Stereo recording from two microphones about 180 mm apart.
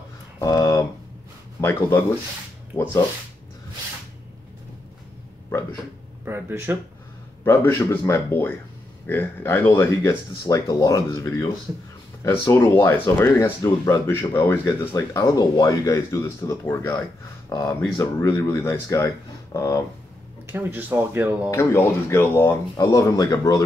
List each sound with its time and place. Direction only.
0.4 s a sound: 20° left (ahead or behind)
1.6 s speech: 15° left (ahead or behind)
6.2 s speech: 15° right (ahead or behind)
7.4 s speech: 10° left (ahead or behind)
20.4 s speech: 10° right (ahead or behind)
21.5 s speech: 15° left (ahead or behind)